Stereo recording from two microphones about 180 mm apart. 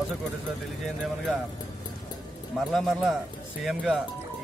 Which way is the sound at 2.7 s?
Centre (ahead or behind).